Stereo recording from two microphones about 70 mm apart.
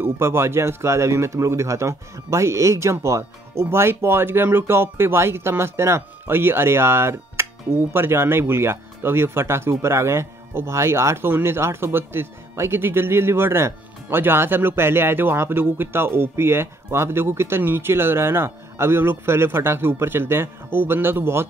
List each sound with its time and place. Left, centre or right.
0.0 s speech: right